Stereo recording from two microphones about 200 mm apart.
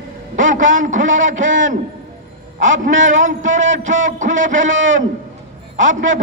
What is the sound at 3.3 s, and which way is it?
A man's voice, 40° right (ahead or behind).